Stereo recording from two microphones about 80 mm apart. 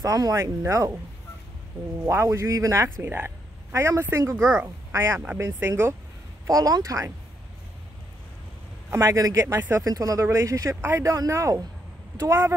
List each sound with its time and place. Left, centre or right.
0.0 s speech: right
2.0 s speech: right
3.1 s speech: right
3.7 s speech: right
6.4 s speech: right
8.9 s speech: right